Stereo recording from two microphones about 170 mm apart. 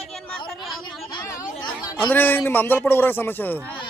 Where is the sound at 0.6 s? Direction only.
Centre (ahead or behind).